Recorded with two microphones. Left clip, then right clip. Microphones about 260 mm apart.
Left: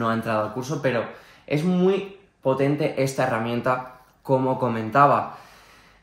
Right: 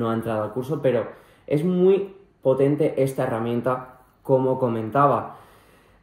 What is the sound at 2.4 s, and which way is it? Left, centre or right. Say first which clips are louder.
Speech: right 2 dB; left.